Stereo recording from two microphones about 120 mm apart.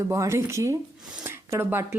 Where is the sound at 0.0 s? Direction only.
25° right (ahead or behind).